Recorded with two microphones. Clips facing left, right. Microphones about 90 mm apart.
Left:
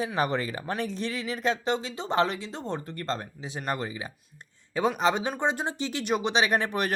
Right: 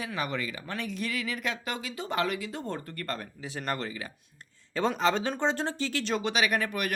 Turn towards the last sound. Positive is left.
turn(degrees=30)  # may be behind; listen again after turning